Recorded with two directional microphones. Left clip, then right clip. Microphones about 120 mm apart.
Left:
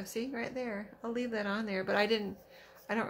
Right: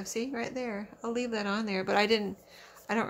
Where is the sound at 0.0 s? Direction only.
30° right (ahead or behind).